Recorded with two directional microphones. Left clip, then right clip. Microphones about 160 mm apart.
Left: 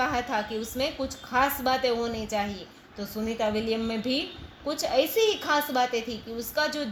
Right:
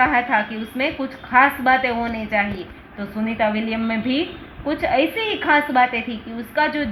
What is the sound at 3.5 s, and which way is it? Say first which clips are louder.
Speech: right 5 dB; 35° left (ahead or behind).